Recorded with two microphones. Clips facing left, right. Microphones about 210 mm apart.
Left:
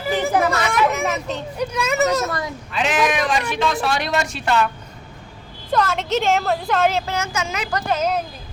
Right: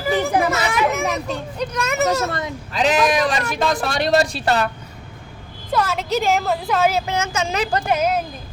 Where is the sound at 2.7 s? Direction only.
35° right (ahead or behind).